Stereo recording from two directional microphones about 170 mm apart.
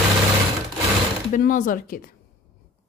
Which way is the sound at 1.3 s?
50° left (ahead or behind).